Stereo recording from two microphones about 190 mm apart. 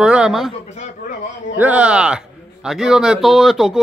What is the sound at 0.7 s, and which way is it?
Speech, 40° left (ahead or behind).